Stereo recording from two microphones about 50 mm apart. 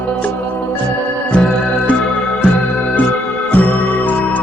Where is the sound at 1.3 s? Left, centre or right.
Centre.